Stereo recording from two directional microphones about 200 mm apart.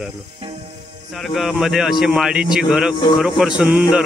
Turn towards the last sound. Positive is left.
turn(degrees=-5)  # may be behind; listen again after turning